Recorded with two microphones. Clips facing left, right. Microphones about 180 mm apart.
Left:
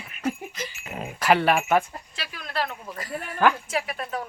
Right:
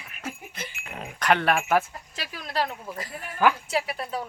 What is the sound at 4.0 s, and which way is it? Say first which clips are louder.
Speech: even; 30° right (ahead or behind).